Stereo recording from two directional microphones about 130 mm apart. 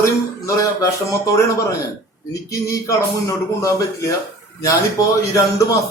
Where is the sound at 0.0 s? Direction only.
25° left (ahead or behind).